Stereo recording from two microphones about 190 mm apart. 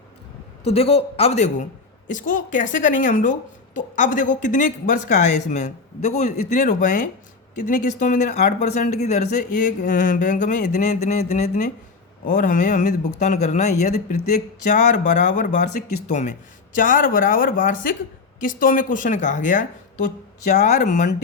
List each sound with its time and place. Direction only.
0.6 s a woman's voice: 30° left (ahead or behind)